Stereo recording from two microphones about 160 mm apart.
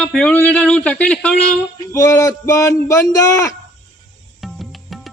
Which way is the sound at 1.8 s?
20° left (ahead or behind).